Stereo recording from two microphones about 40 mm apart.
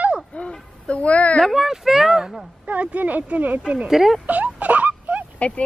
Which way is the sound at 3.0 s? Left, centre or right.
Right.